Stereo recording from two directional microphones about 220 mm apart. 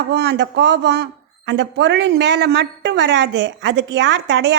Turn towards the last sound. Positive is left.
turn(degrees=-55)  # may be behind; listen again after turning